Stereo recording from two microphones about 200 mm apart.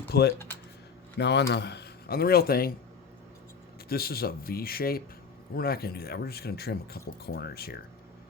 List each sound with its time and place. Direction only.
0.1 s speech: 55° left (ahead or behind)
3.8 s speech: 50° left (ahead or behind)